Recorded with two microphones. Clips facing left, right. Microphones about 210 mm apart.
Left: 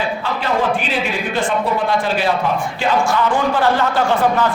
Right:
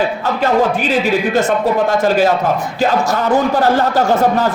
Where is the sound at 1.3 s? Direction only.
40° right (ahead or behind).